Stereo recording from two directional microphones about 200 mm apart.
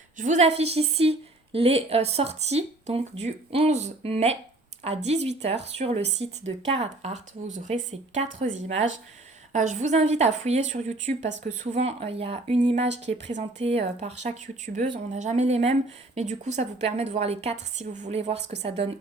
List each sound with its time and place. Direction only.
0.2 s speech: 35° right (ahead or behind)
6.1 s a woman's voice: 65° right (ahead or behind)
6.7 s speech: 35° right (ahead or behind)